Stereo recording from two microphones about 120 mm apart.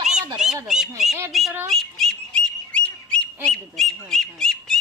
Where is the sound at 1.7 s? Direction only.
5° left (ahead or behind).